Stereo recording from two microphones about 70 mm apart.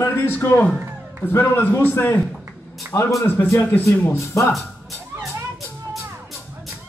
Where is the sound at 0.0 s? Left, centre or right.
Left.